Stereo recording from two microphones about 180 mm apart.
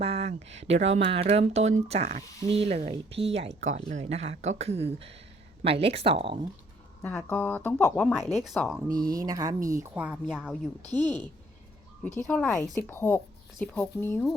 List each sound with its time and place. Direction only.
0.0 s speech: 35° right (ahead or behind)
7.0 s a woman's voice: 10° left (ahead or behind)
8.9 s a woman's voice: 20° right (ahead or behind); by 10.7 s centre (ahead or behind)
10.8 s speech: 25° right (ahead or behind)
12.0 s speech: 10° left (ahead or behind)